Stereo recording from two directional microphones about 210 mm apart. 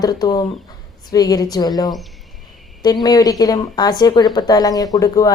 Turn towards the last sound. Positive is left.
turn(degrees=15)  # may be behind; listen again after turning